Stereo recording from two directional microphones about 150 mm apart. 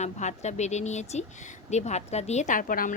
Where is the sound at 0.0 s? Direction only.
50° left (ahead or behind).